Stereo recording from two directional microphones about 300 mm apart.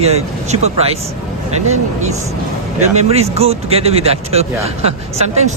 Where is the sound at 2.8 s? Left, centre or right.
Right.